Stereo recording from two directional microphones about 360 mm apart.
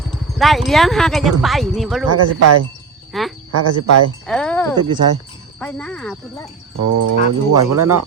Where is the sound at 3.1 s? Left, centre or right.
Centre.